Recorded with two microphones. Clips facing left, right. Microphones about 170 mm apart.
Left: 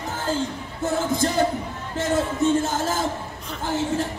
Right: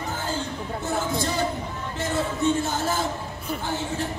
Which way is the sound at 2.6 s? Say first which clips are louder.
Left 2 dB; 45° left (ahead or behind).